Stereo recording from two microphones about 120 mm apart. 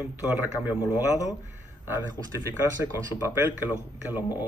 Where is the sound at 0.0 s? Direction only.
15° right (ahead or behind).